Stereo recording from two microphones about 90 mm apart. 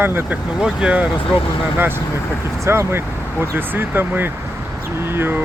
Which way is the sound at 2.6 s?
30° right (ahead or behind).